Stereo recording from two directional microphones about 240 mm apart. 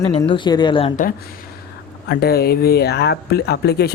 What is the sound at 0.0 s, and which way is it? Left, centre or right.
Speech, left.